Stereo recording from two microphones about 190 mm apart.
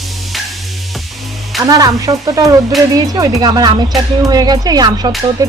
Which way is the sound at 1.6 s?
20° right (ahead or behind).